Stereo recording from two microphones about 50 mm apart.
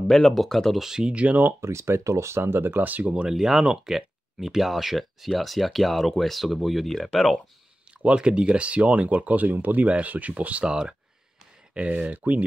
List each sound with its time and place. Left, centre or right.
0.1 s speech: centre
0.7 s speech: centre
1.1 s speech: right
1.6 s speech: right
2.4 s speech: right
3.1 s speech: right
3.3 s speech: centre
8.0 s speech: right
10.6 s speech: centre; by 12.4 s right